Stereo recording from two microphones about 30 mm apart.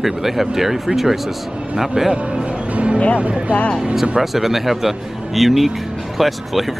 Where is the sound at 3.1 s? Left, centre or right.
Right.